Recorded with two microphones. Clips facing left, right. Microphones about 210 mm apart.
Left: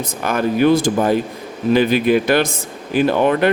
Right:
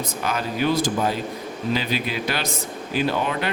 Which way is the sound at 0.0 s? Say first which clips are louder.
Left 7 dB; 55° left (ahead or behind).